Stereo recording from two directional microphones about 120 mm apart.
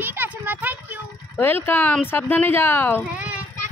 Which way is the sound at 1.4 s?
20° left (ahead or behind).